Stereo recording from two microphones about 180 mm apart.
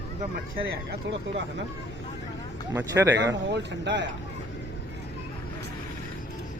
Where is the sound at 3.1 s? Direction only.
80° right.